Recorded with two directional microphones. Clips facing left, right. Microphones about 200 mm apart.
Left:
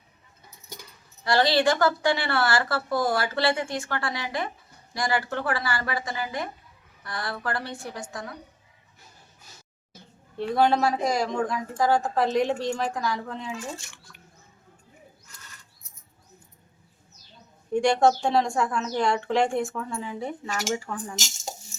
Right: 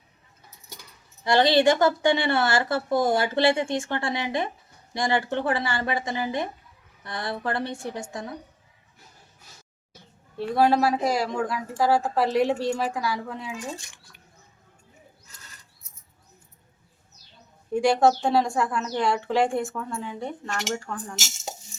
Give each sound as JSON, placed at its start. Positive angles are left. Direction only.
{"t": 1.2, "sound": "a woman's voice", "side_deg": -25}
{"t": 10.3, "sound": "speech", "side_deg": -5}
{"t": 17.7, "sound": "speech", "side_deg": -5}